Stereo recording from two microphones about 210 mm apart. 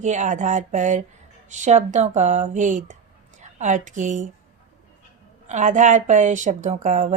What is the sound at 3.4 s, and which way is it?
Speech, 35° right (ahead or behind).